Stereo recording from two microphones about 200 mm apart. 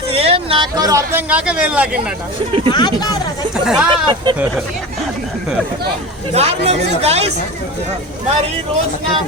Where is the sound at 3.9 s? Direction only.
25° right (ahead or behind).